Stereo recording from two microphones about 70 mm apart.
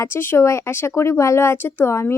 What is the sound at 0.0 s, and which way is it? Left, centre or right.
Speech, left.